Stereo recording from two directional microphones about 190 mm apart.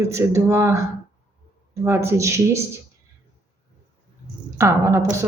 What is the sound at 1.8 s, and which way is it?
Speech, 15° right (ahead or behind).